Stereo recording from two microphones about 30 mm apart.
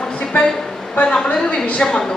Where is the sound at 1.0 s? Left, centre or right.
Left.